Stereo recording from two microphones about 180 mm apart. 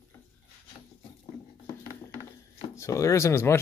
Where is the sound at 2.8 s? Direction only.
15° left (ahead or behind).